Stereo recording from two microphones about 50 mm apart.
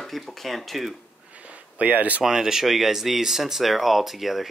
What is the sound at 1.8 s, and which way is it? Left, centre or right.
Speech, right.